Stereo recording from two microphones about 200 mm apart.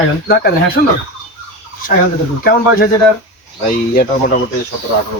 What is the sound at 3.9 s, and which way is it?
Speech, 50° left (ahead or behind).